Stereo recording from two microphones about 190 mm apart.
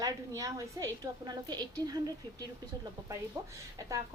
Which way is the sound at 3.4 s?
15° right (ahead or behind).